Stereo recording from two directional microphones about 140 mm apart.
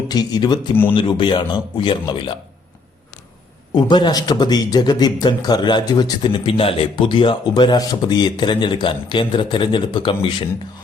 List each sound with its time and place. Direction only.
0.1 s speech: 30° left (ahead or behind)
3.7 s speech: 30° left (ahead or behind)